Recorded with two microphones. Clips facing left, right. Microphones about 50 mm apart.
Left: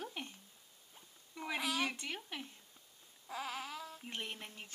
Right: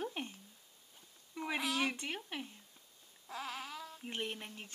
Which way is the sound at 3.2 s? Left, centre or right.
Centre.